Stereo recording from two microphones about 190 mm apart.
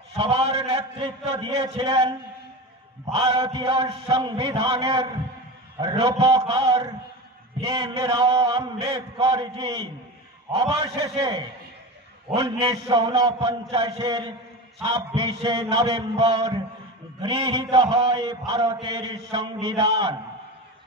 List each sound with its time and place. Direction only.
0.2 s mantra: 30° right (ahead or behind)
3.2 s mantra: 25° right (ahead or behind)